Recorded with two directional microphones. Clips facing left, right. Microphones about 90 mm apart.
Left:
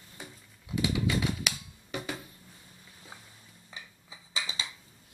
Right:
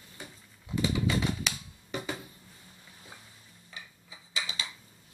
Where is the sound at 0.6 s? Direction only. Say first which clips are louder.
Even; 5° left (ahead or behind).